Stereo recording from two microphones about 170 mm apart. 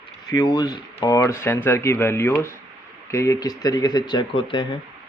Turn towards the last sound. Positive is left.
turn(degrees=30)  # may be behind; listen again after turning